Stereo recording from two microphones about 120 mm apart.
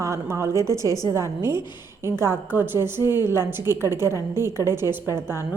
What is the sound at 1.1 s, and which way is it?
A woman's voice, 20° right (ahead or behind).